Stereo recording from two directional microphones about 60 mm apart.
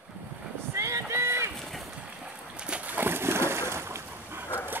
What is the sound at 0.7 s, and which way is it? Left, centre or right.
Clip-clop, right.